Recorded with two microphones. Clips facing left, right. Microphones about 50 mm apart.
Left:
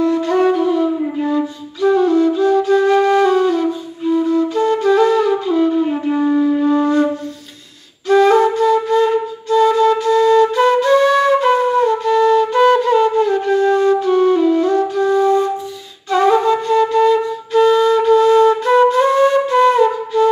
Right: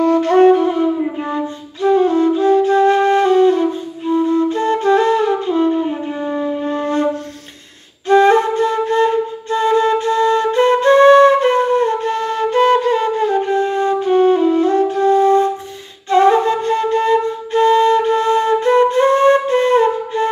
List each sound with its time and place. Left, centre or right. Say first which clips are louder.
0.0 s flute: right 4 dB; right
6.1 s music: left 6 dB; centre
6.7 s wind instrument: left 4 dB; right
8.1 s flute: even; right